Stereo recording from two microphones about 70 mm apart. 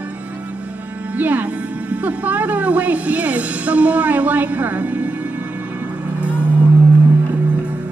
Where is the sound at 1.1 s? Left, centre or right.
Right.